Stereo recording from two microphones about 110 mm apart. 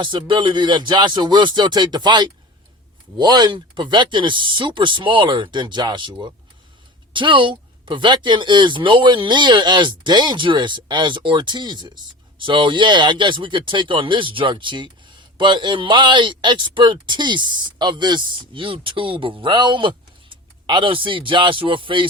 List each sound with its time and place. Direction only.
0.0 s speech: 50° right (ahead or behind)
7.1 s speech: 50° right (ahead or behind)